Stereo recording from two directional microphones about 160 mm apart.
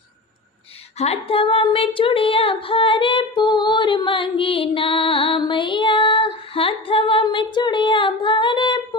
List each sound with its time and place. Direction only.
0.9 s female singing: 40° left (ahead or behind)